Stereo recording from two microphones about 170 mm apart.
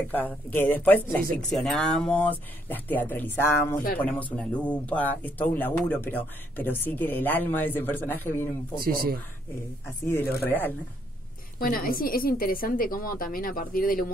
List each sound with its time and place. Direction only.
0.1 s speech: 10° left (ahead or behind)
8.7 s speech: 60° right (ahead or behind)
10.0 s speech: 10° left (ahead or behind)
11.6 s a woman's voice: 60° left (ahead or behind)